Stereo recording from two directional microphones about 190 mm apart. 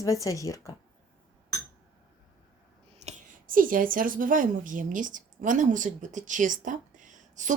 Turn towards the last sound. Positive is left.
turn(degrees=-40)  # may be behind; listen again after turning